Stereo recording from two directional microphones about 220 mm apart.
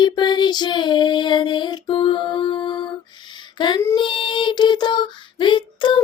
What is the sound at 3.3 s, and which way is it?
Music, 20° left (ahead or behind).